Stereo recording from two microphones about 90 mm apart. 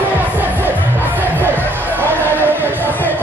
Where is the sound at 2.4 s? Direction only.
25° right (ahead or behind).